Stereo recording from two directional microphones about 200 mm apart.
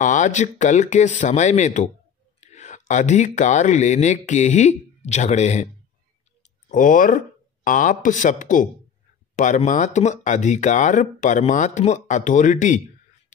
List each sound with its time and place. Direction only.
0.0 s speech: 40° left (ahead or behind)
6.7 s speech: 40° left (ahead or behind)